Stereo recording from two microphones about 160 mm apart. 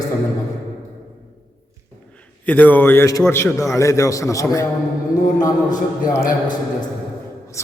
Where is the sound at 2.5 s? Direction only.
10° left (ahead or behind).